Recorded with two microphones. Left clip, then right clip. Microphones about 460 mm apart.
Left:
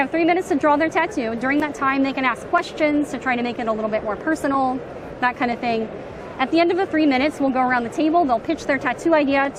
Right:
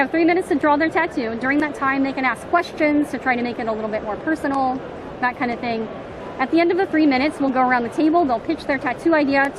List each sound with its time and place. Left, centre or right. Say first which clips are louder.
0.0 s a woman's voice: right 1 dB; centre